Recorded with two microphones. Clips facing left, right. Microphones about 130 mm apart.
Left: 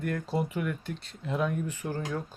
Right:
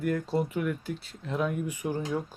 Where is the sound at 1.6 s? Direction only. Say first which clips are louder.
Right 2 dB; 15° right (ahead or behind).